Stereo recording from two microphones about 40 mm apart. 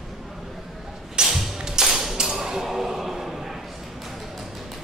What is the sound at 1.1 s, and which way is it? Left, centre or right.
Music, centre.